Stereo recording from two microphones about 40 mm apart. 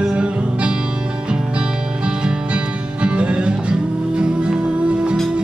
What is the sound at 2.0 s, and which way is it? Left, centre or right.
Music, right.